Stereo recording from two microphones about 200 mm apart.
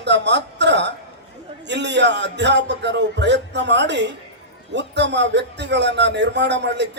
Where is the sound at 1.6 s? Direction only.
60° right (ahead or behind).